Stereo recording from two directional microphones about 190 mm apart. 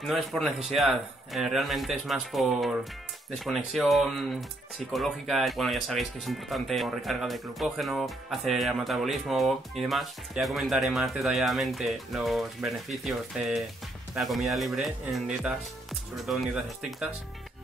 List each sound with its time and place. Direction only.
0.0 s speech: centre (ahead or behind)